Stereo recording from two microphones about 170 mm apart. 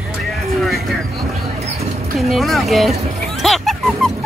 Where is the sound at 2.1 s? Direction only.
Centre (ahead or behind).